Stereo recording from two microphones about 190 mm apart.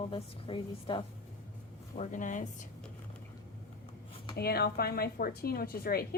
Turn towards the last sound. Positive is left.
turn(degrees=50)  # may be behind; listen again after turning